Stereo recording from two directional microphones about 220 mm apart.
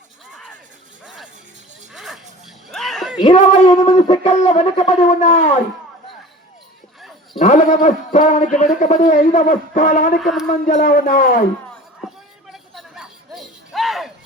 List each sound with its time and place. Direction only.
1.0 s music: centre (ahead or behind)
1.9 s a sound: centre (ahead or behind)
3.2 s a man's voice: 30° left (ahead or behind)
7.3 s a man's voice: 35° left (ahead or behind)
10.2 s speech: centre (ahead or behind)
10.7 s a man's voice: 35° left (ahead or behind)
12.0 s a sound: centre (ahead or behind)